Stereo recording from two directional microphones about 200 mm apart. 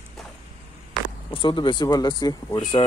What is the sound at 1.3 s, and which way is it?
Speech, 25° left (ahead or behind).